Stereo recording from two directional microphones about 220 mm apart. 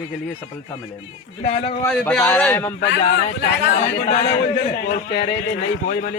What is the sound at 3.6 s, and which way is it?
A man's voice, 40° left (ahead or behind).